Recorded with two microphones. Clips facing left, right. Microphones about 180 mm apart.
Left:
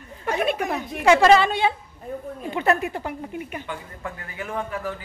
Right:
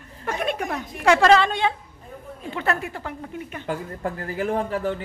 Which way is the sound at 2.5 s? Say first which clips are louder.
Left 4 dB; 20° left (ahead or behind).